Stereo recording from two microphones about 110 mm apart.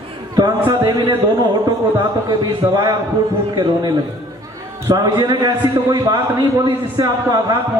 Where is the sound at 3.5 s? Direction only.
40° right (ahead or behind).